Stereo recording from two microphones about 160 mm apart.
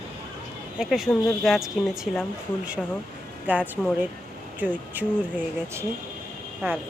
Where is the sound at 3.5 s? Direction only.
10° right (ahead or behind).